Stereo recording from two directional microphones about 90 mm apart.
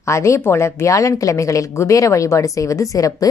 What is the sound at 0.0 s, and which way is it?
A woman's voice, 35° left (ahead or behind).